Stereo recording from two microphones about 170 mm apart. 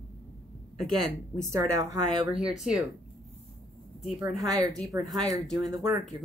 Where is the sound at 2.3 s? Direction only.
5° right (ahead or behind).